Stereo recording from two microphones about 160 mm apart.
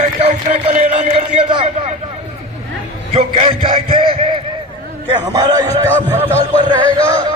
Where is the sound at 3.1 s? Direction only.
40° right (ahead or behind); by 5.5 s 25° right (ahead or behind).